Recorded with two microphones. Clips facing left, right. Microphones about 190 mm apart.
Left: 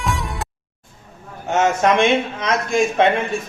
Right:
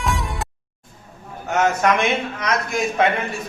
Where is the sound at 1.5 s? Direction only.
25° left (ahead or behind).